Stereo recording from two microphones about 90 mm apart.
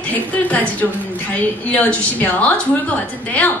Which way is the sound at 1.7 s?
15° left (ahead or behind).